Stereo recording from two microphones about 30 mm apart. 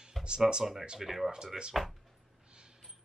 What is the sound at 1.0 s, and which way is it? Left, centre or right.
Speech, centre.